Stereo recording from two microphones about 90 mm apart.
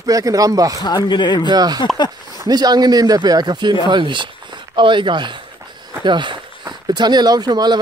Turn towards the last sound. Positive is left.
turn(degrees=-50)  # may be behind; listen again after turning